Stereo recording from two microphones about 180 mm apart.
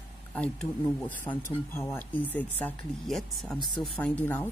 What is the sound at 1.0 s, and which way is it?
A woman's voice, 10° left (ahead or behind).